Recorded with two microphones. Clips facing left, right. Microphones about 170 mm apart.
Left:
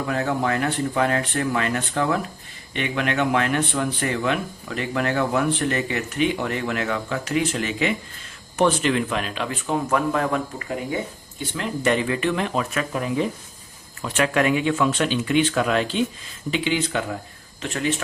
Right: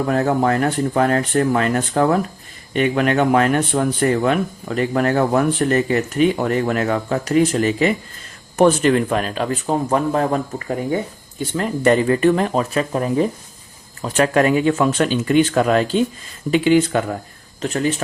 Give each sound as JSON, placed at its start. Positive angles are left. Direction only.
{"t": 0.1, "sound": "speech", "side_deg": -45}
{"t": 11.3, "sound": "speech", "side_deg": -45}